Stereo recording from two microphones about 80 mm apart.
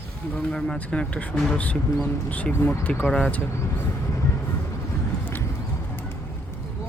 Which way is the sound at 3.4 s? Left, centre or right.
Left.